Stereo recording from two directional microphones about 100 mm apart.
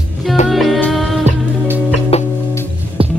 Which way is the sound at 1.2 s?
20° right (ahead or behind).